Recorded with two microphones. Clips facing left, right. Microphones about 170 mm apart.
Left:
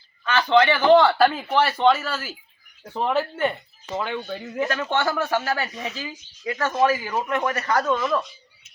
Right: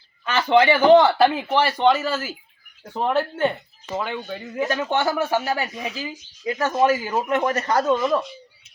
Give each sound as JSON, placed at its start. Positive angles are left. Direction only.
{"t": 0.3, "sound": "speech", "side_deg": -20}
{"t": 0.6, "sound": "speech", "side_deg": -10}
{"t": 2.8, "sound": "speech", "side_deg": 0}
{"t": 4.7, "sound": "speech", "side_deg": -15}
{"t": 6.1, "sound": "speech", "side_deg": -25}